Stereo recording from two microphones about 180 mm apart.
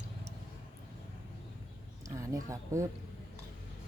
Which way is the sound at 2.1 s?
15° right (ahead or behind).